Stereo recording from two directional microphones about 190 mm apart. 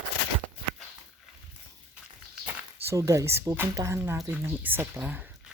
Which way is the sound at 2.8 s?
15° right (ahead or behind).